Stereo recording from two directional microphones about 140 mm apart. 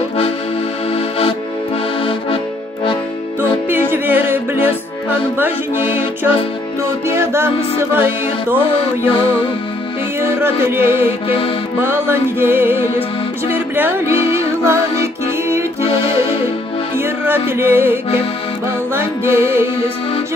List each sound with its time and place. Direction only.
3.3 s music: 15° right (ahead or behind)
6.8 s music: 15° right (ahead or behind)
9.1 s music: 40° left (ahead or behind)
10.2 s music: 15° right (ahead or behind)
11.2 s music: 40° left (ahead or behind)
11.8 s music: 15° right (ahead or behind)
17.0 s music: 15° right (ahead or behind)